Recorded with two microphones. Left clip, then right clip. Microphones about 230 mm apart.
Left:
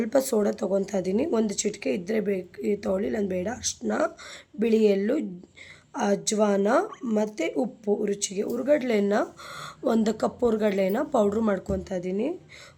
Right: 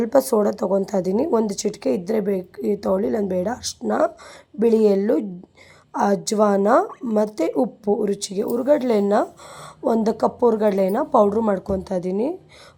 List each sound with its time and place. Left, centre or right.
0.1 s a woman's voice: centre
6.2 s a woman's voice: centre
6.7 s speech: centre
7.3 s a woman's voice: centre